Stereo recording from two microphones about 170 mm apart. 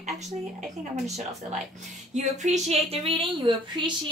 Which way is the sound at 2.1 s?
45° right (ahead or behind).